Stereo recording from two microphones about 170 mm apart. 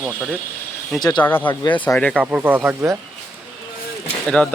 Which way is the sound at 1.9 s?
5° left (ahead or behind).